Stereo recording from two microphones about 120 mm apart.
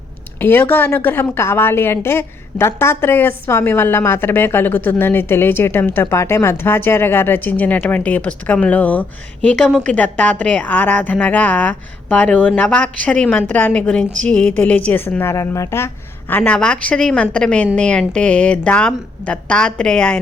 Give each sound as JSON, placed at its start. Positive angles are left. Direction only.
{"t": 0.3, "sound": "a woman's voice", "side_deg": 15}